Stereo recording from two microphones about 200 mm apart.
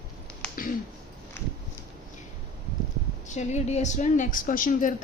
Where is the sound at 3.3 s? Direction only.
35° left (ahead or behind).